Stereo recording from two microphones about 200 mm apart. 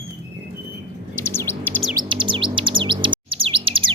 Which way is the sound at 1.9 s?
20° right (ahead or behind).